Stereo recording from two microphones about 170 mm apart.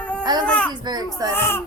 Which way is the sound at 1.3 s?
15° left (ahead or behind).